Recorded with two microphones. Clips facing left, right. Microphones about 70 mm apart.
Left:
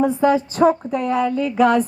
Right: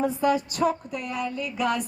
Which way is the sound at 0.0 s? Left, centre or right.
Left.